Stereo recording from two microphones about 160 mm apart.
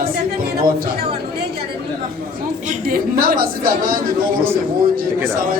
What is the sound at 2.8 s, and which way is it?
Speech, 65° right (ahead or behind).